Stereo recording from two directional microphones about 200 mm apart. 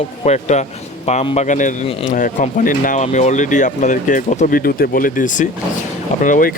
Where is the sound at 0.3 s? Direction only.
35° left (ahead or behind).